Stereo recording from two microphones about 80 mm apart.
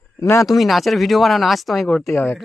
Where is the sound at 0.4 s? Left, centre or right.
Centre.